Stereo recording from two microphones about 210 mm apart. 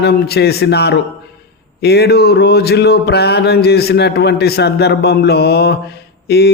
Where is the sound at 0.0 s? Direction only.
50° left (ahead or behind).